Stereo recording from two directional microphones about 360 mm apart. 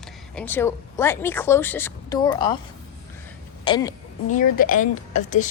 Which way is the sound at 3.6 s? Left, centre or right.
Centre.